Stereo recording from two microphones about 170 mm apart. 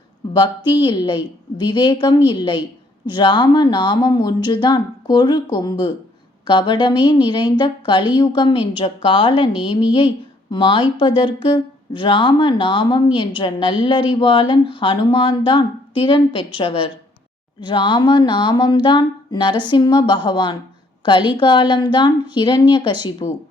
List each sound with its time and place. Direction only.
0.3 s a woman's voice: 25° left (ahead or behind)
10.5 s a woman's voice: 30° left (ahead or behind)